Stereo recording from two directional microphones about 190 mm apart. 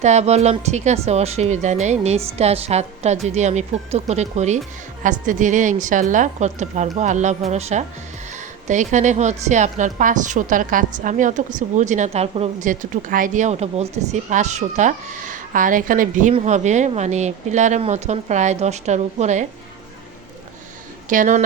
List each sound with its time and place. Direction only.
0.0 s a woman's voice: 35° right (ahead or behind)
21.1 s speech: 40° right (ahead or behind)